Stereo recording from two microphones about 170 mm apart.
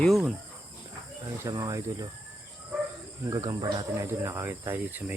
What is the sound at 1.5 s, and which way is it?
Speech, 20° right (ahead or behind).